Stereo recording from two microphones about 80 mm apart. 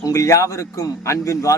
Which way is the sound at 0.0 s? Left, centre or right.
Left.